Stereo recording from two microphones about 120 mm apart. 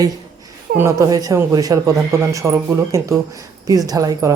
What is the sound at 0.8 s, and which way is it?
Speech, 25° right (ahead or behind).